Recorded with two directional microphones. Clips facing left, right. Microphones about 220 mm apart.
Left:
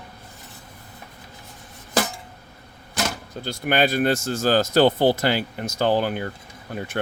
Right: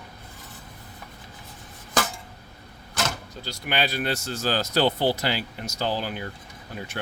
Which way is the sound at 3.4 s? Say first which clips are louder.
Left 7 dB; 50° left (ahead or behind).